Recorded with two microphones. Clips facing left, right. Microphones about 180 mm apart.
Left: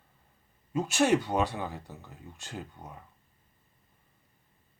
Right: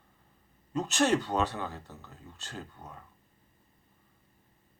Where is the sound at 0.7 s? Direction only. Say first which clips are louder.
Left 2 dB; 10° left (ahead or behind).